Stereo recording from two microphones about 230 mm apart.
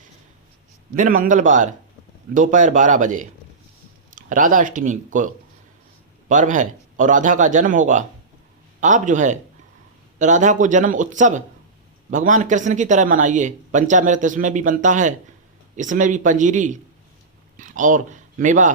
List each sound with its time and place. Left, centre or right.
0.9 s speech: right